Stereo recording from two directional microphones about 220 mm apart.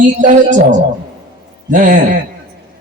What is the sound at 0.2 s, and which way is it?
Speech, 35° right (ahead or behind).